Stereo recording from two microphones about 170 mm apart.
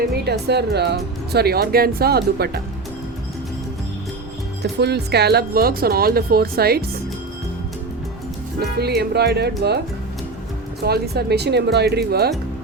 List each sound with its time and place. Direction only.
0.3 s speech: 75° right (ahead or behind)
4.6 s speech: 75° right (ahead or behind)
8.8 s speech: 70° right (ahead or behind)
10.8 s speech: 70° right (ahead or behind)